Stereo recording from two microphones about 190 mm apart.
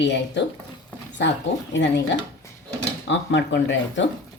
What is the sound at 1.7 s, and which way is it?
Speech, 65° left (ahead or behind).